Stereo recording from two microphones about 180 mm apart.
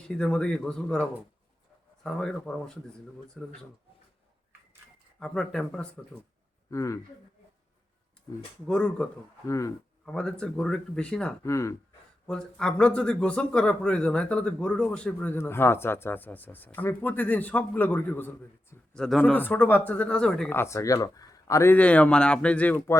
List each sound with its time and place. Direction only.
0.1 s speech: 5° left (ahead or behind)
2.0 s speech: 5° left (ahead or behind)
5.2 s speech: 5° left (ahead or behind)
6.7 s speech: 15° left (ahead or behind)
8.6 s speech: 5° left (ahead or behind)
9.5 s speech: 15° left (ahead or behind)
10.1 s speech: 5° left (ahead or behind)
11.4 s speech: 15° left (ahead or behind)
12.3 s speech: 5° left (ahead or behind)